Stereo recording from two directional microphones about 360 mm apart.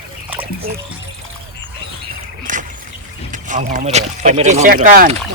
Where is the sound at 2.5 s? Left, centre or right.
Right.